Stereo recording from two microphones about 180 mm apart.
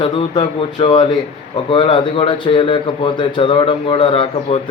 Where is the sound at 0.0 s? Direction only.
25° left (ahead or behind).